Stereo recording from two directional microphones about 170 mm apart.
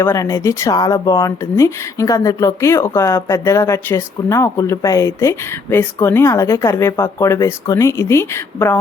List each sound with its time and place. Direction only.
0.0 s speech: 15° left (ahead or behind)